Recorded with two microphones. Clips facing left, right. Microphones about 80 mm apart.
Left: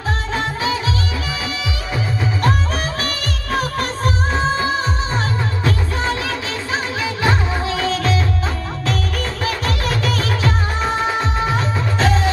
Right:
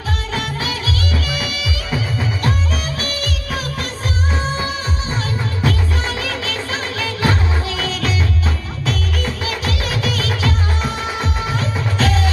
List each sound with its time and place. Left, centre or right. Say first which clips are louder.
0.3 s music: left 4 dB; left
5.7 s music: left 2 dB; left
8.8 s music: right 1 dB; left